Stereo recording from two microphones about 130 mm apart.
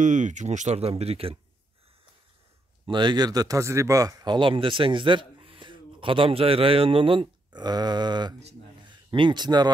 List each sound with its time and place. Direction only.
0.0 s speech: 70° right (ahead or behind); by 1.4 s 50° right (ahead or behind)
2.9 s speech: 35° right (ahead or behind)